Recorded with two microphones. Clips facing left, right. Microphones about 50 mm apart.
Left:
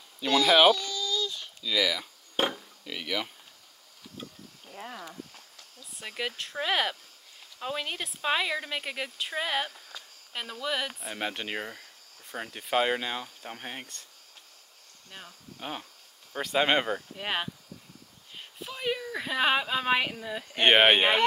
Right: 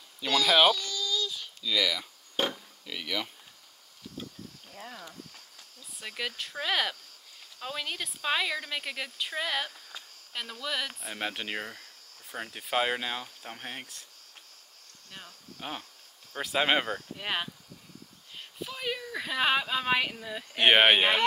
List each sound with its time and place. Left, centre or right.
0.2 s baby cry: centre
2.3 s speech: centre
4.7 s speech: left
5.9 s speech: centre
15.0 s speech: centre